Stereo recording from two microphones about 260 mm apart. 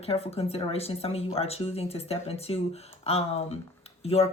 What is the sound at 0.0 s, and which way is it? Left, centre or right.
Speech, left.